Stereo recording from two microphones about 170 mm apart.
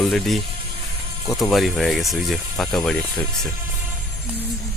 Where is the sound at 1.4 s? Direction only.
Centre (ahead or behind).